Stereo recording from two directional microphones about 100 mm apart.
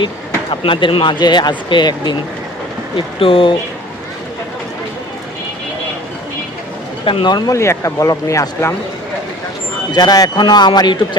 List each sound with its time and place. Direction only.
0.5 s speech: 60° left (ahead or behind)
2.9 s speech: 65° left (ahead or behind)
7.0 s speech: 60° left (ahead or behind)
7.5 s speech: 30° left (ahead or behind)
9.9 s speech: 40° left (ahead or behind)